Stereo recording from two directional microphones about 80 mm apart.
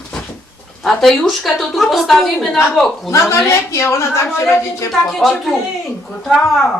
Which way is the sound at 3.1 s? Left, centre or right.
Left.